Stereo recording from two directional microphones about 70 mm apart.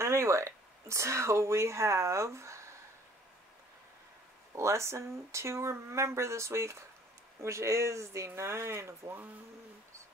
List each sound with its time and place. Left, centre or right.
0.0 s speech: right
4.6 s speech: right